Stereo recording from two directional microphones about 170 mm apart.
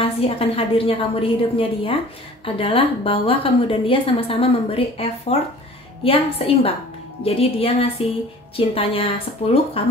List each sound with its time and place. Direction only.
0.0 s a woman's voice: 35° left (ahead or behind)